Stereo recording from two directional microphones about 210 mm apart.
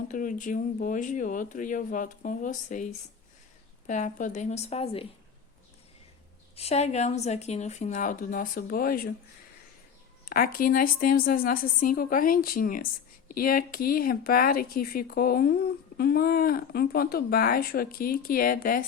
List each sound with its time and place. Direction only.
0.1 s speech: 40° left (ahead or behind)
3.8 s speech: 35° left (ahead or behind)
6.6 s speech: 30° left (ahead or behind)
10.2 s a woman's voice: 40° left (ahead or behind)